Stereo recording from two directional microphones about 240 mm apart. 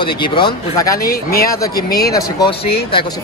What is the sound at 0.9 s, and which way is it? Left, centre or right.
Speech, left.